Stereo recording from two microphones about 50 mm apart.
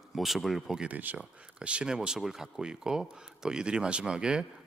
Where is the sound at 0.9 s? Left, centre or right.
Right.